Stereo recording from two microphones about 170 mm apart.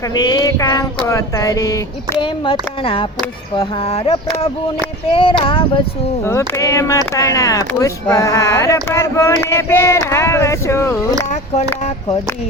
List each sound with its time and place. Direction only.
0.1 s speech: 25° left (ahead or behind)
2.2 s speech: 30° left (ahead or behind)
5.4 s speech: 30° left (ahead or behind)
6.2 s speech: 15° left (ahead or behind)
8.1 s male singing: 15° left (ahead or behind)